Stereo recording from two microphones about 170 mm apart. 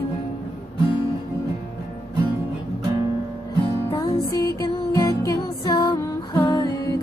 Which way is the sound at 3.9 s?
20° left (ahead or behind).